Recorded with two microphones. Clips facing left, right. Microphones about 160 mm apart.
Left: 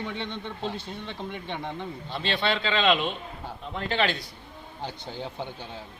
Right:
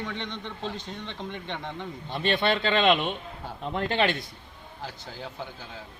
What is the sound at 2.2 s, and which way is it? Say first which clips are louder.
Speech: right 3 dB; 50° right (ahead or behind).